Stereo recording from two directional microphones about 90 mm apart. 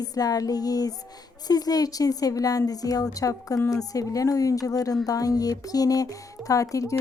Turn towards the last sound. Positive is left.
turn(degrees=40)  # may be behind; listen again after turning